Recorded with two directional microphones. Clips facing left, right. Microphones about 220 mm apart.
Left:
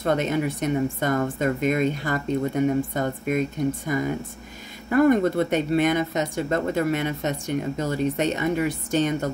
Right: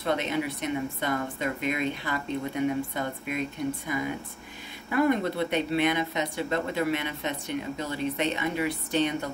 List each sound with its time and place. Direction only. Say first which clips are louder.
0.0 s speech: left 5 dB; 45° left (ahead or behind)